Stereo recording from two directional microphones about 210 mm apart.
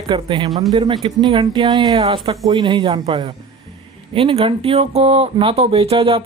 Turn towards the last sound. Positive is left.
turn(degrees=-25)  # may be behind; listen again after turning